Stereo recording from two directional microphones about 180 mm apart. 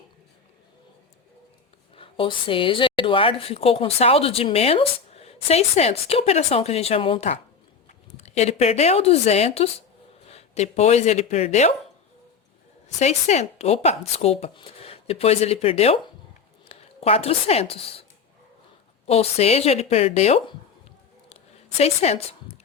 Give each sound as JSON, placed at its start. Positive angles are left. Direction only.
{"t": 2.0, "sound": "speech", "side_deg": 30}
{"t": 13.0, "sound": "speech", "side_deg": 40}
{"t": 19.0, "sound": "speech", "side_deg": 35}
{"t": 21.8, "sound": "speech", "side_deg": 35}